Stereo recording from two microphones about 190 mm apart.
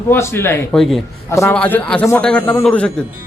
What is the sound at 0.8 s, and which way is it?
Speech, centre (ahead or behind).